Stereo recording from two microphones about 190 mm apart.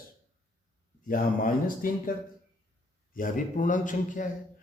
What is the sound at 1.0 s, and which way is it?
A man's voice, 45° left (ahead or behind).